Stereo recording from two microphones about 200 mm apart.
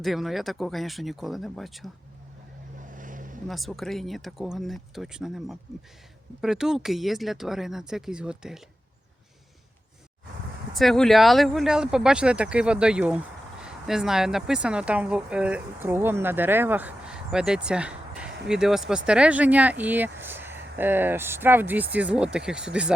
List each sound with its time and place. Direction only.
0.0 s speech: centre (ahead or behind)
2.9 s vehicle: 40° right (ahead or behind)
3.4 s speech: centre (ahead or behind)
10.8 s speech: centre (ahead or behind)